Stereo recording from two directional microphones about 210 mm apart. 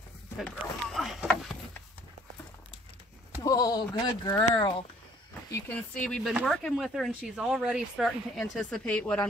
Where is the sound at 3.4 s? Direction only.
15° left (ahead or behind).